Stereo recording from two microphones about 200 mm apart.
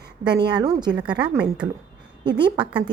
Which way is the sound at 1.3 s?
5° right (ahead or behind).